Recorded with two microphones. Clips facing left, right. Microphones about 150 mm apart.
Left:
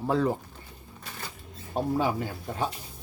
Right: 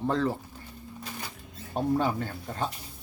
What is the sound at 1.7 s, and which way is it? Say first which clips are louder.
Speech: even; 5° left (ahead or behind).